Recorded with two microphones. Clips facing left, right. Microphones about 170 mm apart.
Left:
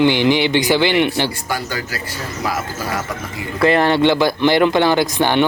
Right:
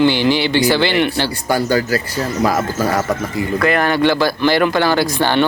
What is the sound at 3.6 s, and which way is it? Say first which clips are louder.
Speech: left 2 dB; 25° left (ahead or behind).